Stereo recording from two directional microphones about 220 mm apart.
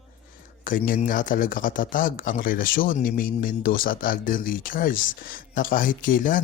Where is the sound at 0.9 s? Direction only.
40° left (ahead or behind).